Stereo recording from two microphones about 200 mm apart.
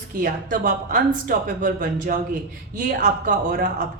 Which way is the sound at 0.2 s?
40° right (ahead or behind).